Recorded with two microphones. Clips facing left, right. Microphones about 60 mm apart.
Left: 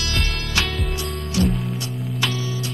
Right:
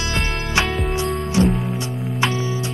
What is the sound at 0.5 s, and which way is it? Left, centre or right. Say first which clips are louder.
Music: right 5 dB; right.